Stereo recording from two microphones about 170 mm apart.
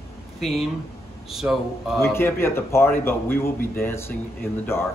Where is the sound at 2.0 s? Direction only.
15° left (ahead or behind).